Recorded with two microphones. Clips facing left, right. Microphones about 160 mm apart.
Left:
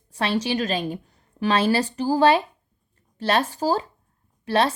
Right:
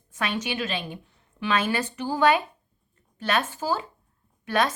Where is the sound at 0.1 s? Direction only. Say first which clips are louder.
Left 5 dB; 35° left (ahead or behind).